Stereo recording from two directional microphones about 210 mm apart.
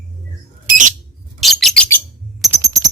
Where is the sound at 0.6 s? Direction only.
40° right (ahead or behind).